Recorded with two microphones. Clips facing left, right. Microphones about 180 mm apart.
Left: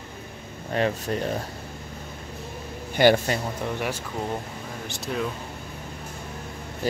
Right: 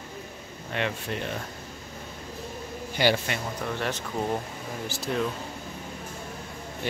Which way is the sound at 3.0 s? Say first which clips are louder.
Left 6 dB; 50° left (ahead or behind).